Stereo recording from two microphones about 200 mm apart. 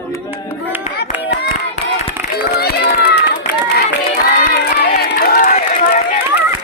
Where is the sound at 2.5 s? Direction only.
55° left (ahead or behind).